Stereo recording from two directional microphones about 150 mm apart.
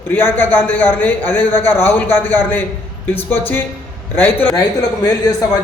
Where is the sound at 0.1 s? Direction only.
15° left (ahead or behind).